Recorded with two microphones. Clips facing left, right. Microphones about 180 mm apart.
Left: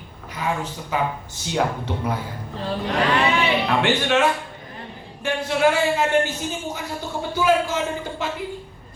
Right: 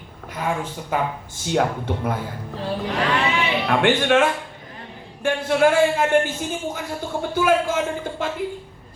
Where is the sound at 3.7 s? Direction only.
50° right (ahead or behind).